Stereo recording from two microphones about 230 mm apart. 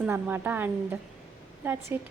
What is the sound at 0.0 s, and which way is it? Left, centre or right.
A woman's voice, centre.